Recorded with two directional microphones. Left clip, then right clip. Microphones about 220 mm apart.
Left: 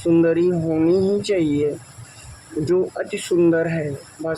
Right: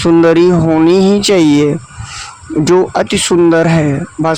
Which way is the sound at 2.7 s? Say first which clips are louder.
Right 10 dB; 45° right (ahead or behind).